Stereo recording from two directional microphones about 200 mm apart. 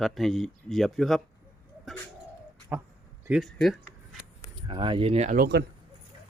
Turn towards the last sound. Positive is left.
turn(degrees=-55)  # may be behind; listen again after turning